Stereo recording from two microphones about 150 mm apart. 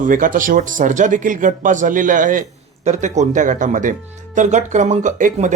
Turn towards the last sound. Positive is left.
turn(degrees=-55)  # may be behind; listen again after turning